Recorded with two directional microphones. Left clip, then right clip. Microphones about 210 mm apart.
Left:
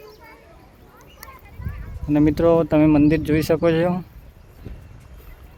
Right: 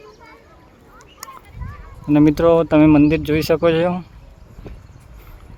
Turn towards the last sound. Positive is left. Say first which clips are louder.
# right 3 dB
turn(degrees=-10)  # may be behind; listen again after turning